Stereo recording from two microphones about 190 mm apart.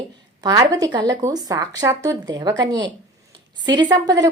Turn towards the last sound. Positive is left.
turn(degrees=-20)  # may be behind; listen again after turning